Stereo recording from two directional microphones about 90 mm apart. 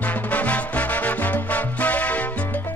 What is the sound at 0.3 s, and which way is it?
Music, 15° left (ahead or behind).